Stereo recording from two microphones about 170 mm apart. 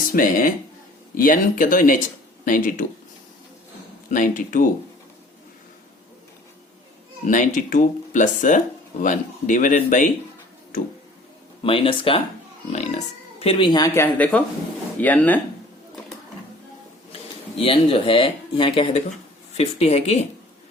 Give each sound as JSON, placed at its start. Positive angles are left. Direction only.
{"t": 0.1, "sound": "speech", "side_deg": 55}
{"t": 4.1, "sound": "speech", "side_deg": 50}
{"t": 7.3, "sound": "speech", "side_deg": 45}
{"t": 11.6, "sound": "speech", "side_deg": 30}
{"t": 13.4, "sound": "speech", "side_deg": 30}
{"t": 17.6, "sound": "speech", "side_deg": 35}